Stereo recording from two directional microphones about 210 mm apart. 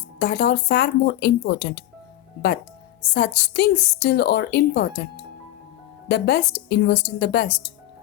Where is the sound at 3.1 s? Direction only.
50° left (ahead or behind).